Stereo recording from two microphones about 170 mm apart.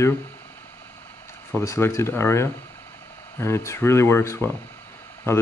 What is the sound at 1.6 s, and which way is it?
Speech, 15° left (ahead or behind).